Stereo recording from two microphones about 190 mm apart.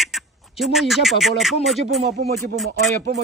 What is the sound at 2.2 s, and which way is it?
Speech, 60° right (ahead or behind).